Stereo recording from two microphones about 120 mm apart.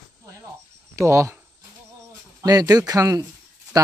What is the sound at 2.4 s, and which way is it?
Speech, 30° right (ahead or behind).